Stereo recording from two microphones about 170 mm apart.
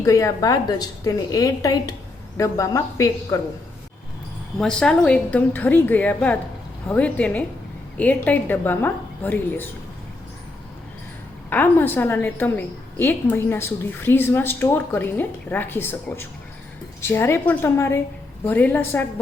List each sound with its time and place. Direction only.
0.0 s a woman's voice: 20° left (ahead or behind)
4.5 s a woman's voice: 5° left (ahead or behind)
11.4 s a woman's voice: 10° left (ahead or behind)